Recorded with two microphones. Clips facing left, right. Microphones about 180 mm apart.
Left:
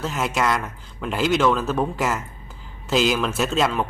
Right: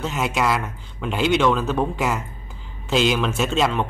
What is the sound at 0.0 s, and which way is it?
Speech, centre (ahead or behind).